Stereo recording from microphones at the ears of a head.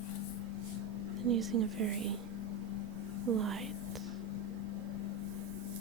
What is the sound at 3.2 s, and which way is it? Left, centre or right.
Speech, right.